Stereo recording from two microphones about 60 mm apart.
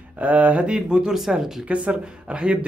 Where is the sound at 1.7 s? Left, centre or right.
Right.